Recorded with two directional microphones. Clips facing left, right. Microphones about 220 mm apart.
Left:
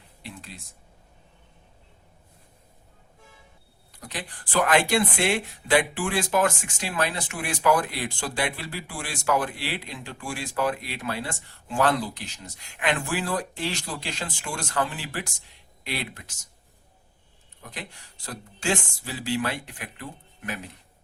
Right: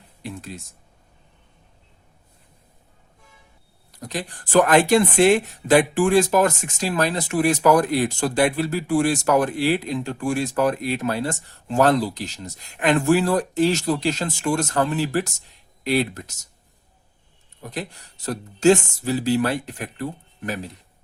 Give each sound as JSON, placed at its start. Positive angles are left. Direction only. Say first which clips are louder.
{"t": 0.2, "sound": "a sound", "louder": "right 8 dB", "side_deg": -45}
{"t": 3.9, "sound": "speech", "louder": "right 7 dB", "side_deg": -40}
{"t": 17.6, "sound": "speech", "louder": "right 9 dB", "side_deg": -40}